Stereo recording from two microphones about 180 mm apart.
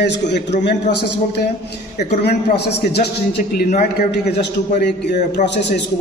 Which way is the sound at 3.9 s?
65° left (ahead or behind).